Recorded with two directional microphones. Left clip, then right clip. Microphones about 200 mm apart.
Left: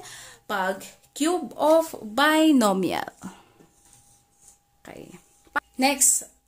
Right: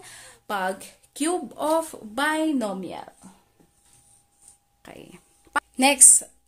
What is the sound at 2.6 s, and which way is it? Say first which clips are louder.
Speech: left 8 dB; 25° left (ahead or behind).